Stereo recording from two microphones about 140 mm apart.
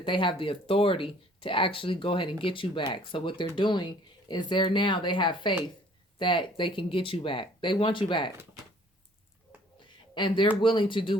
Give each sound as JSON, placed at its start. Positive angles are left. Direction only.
{"t": 0.0, "sound": "speech", "side_deg": 35}
{"t": 10.2, "sound": "speech", "side_deg": 35}